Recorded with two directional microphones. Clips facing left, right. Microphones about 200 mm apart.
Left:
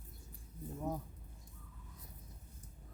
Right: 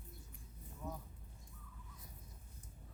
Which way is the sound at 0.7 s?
55° left (ahead or behind).